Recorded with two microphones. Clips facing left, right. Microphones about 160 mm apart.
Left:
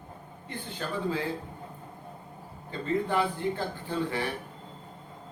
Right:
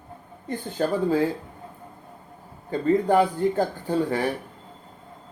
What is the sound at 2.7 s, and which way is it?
Speech, 45° right (ahead or behind).